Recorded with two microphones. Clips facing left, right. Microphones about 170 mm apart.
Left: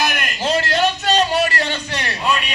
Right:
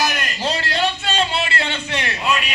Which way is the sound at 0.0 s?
55° left (ahead or behind).